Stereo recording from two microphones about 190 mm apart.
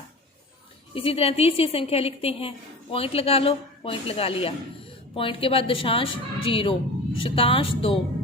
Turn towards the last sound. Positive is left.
turn(degrees=30)  # may be behind; listen again after turning